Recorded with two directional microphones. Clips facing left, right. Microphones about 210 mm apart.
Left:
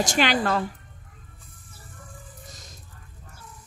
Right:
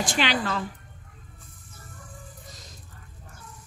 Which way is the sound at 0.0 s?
45° left (ahead or behind).